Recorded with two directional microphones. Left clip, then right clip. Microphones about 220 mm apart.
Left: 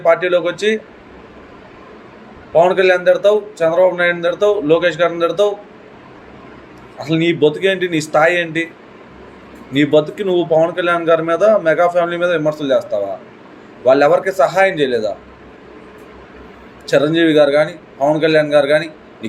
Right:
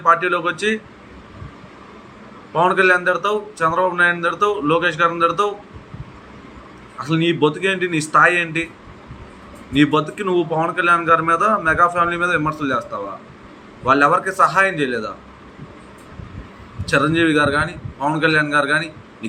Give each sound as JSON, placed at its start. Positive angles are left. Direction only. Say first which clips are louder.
{"t": 0.0, "sound": "a man's voice", "louder": "left 3 dB", "side_deg": -15}
{"t": 2.6, "sound": "a man's voice", "louder": "left 3 dB", "side_deg": -15}
{"t": 7.0, "sound": "a man's voice", "louder": "left 4 dB", "side_deg": -15}
{"t": 9.7, "sound": "a man's voice", "louder": "left 4 dB", "side_deg": -15}
{"t": 16.8, "sound": "a man's voice", "louder": "left 3 dB", "side_deg": -15}